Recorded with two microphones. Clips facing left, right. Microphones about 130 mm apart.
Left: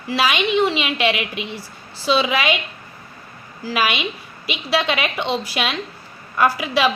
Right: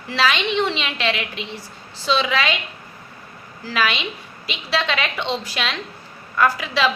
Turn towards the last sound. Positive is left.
turn(degrees=15)  # may be behind; listen again after turning